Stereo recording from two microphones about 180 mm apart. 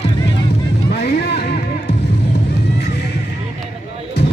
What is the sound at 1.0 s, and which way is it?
Music, 60° left (ahead or behind).